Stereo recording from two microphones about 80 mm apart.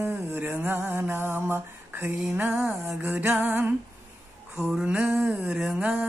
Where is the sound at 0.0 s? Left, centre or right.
Right.